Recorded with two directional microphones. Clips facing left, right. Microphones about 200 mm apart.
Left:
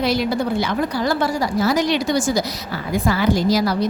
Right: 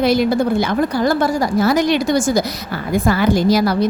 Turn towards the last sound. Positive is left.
turn(degrees=-55)  # may be behind; listen again after turning